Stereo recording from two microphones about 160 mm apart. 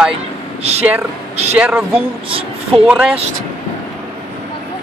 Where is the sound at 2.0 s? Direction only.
35° right (ahead or behind).